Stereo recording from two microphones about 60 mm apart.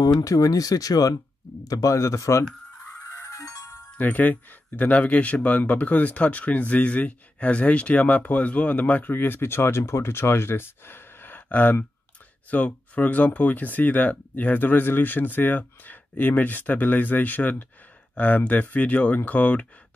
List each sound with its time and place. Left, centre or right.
0.0 s speech: left
3.1 s music: left
4.0 s speech: left